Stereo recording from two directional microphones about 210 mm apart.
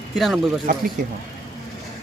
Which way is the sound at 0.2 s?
Centre (ahead or behind).